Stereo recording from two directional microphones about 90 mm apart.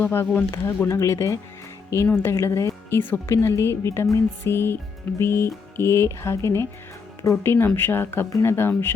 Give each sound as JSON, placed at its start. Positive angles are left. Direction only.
{"t": 0.0, "sound": "speech", "side_deg": 25}
{"t": 0.9, "sound": "speech", "side_deg": 35}
{"t": 3.0, "sound": "speech", "side_deg": 20}